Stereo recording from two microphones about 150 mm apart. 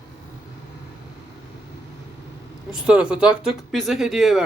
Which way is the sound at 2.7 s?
5° right (ahead or behind).